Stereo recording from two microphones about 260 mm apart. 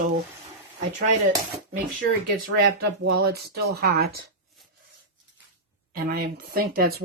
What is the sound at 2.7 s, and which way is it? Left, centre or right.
Speech, right.